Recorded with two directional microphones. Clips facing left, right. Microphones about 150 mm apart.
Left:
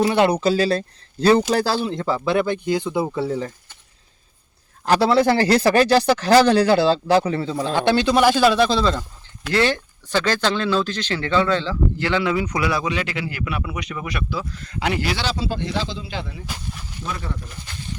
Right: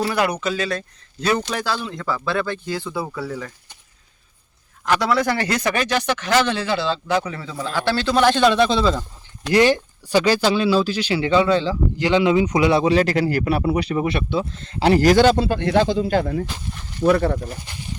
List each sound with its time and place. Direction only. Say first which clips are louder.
0.0 s speech: left 4 dB; 25° left (ahead or behind)
4.9 s speech: left 3 dB; 30° left (ahead or behind); by 9.0 s 5° right (ahead or behind)
9.5 s speech: right 4 dB; 15° right (ahead or behind); by 17.6 s 45° right (ahead or behind)